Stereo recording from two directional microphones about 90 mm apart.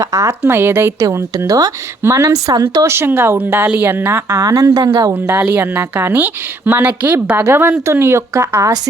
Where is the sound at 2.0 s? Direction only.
30° right (ahead or behind).